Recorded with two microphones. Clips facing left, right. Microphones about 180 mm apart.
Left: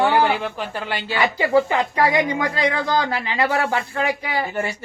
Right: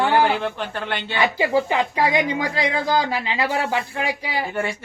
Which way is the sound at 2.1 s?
15° right (ahead or behind).